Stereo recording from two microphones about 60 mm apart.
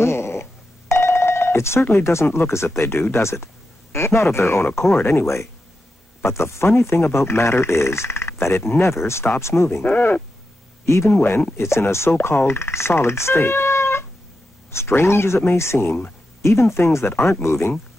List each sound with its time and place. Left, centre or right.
0.0 s speech: left
9.9 s speech: left
10.9 s speech: left